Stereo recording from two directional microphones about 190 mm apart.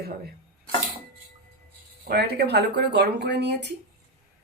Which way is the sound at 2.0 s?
55° right (ahead or behind).